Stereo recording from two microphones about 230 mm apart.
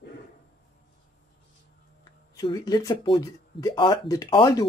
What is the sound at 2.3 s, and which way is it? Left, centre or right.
Speech, centre.